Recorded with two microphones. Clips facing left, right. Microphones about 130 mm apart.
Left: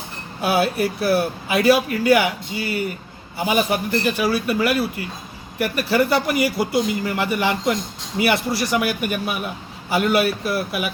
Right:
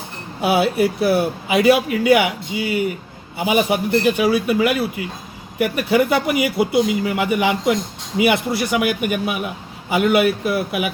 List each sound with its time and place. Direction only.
0.4 s speech: 20° right (ahead or behind)